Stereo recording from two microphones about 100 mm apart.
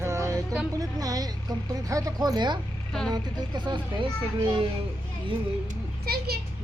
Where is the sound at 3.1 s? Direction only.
50° right (ahead or behind).